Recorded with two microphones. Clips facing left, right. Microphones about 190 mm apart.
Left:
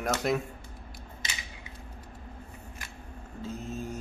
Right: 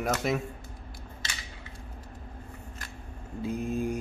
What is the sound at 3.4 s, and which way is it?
Mantra, 15° right (ahead or behind).